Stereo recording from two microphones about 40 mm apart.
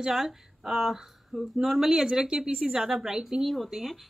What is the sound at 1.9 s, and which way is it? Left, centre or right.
Speech, centre.